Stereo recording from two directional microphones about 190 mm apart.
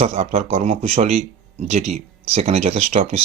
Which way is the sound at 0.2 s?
35° right (ahead or behind).